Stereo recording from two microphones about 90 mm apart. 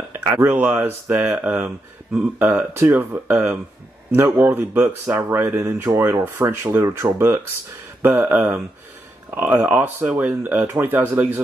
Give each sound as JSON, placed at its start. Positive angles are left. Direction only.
{"t": 0.2, "sound": "speech", "side_deg": -20}